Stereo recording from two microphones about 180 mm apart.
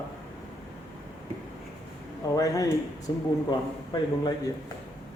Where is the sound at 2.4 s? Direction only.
20° left (ahead or behind).